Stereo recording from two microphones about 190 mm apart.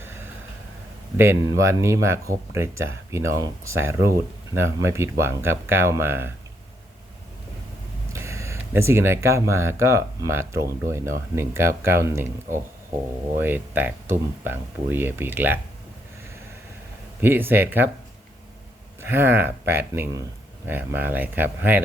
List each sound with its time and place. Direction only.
1.1 s speech: 15° right (ahead or behind)
8.1 s speech: 15° right (ahead or behind)
13.4 s speech: 10° right (ahead or behind)
17.2 s speech: 10° right (ahead or behind)
19.0 s speech: 10° right (ahead or behind)